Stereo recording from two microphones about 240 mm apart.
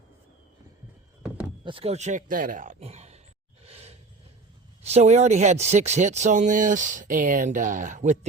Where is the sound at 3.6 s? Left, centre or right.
Right.